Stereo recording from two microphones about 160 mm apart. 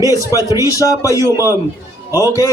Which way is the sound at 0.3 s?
20° right (ahead or behind).